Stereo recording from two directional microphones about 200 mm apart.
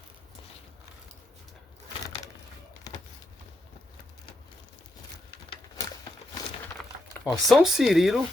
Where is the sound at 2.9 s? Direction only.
20° left (ahead or behind).